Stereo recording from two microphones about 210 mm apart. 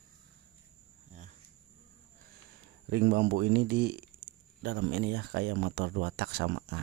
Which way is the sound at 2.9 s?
55° right (ahead or behind).